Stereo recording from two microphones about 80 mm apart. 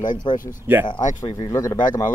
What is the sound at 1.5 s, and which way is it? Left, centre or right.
Speech, left.